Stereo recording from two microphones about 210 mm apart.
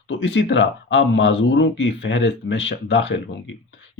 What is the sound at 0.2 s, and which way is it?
Speech, 60° left (ahead or behind).